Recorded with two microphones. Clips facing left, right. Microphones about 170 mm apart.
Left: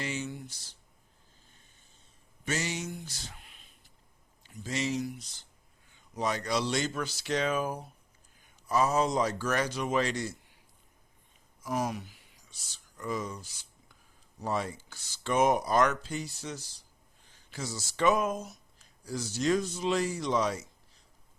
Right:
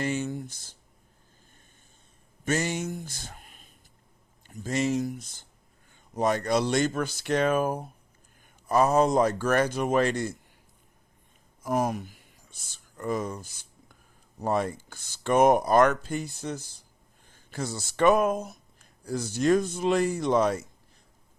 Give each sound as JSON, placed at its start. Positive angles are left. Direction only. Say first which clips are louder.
{"t": 0.0, "sound": "speech", "louder": "right 7 dB", "side_deg": -50}
{"t": 2.4, "sound": "speech", "louder": "right 6 dB", "side_deg": -50}
{"t": 11.6, "sound": "a sound", "louder": "right 5 dB", "side_deg": -50}
{"t": 14.3, "sound": "speech", "louder": "right 6 dB", "side_deg": -55}